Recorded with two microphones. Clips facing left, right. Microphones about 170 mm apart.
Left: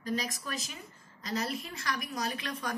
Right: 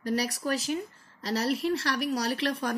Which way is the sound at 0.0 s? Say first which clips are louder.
Right 6 dB; 75° right (ahead or behind).